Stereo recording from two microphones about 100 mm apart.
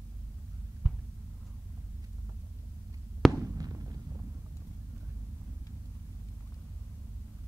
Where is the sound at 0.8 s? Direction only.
Centre (ahead or behind).